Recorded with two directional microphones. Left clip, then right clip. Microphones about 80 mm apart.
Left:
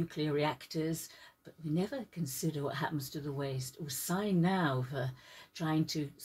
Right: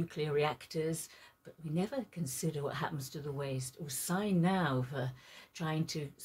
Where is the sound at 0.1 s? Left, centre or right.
Left.